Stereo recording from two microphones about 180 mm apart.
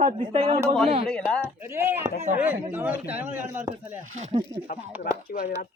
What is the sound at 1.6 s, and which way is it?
Speech, 15° right (ahead or behind).